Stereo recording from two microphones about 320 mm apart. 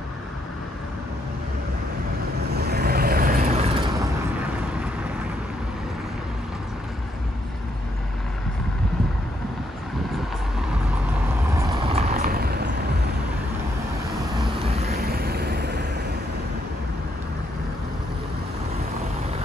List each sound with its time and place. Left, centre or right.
2.5 s vehicle: right
11.5 s vehicle: centre; by 12.6 s right
14.7 s vehicle: right